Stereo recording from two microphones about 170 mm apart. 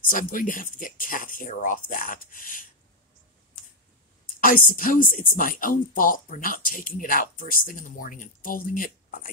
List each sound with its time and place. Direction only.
0.1 s speech: 55° left (ahead or behind)
4.4 s speech: 55° left (ahead or behind)